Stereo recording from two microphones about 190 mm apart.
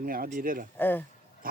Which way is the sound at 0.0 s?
45° right (ahead or behind).